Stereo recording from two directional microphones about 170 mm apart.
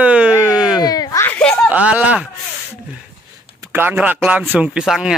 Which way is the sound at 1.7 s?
10° right (ahead or behind).